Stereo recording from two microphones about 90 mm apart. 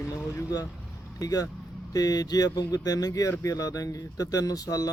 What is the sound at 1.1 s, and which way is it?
Speech, 40° left (ahead or behind).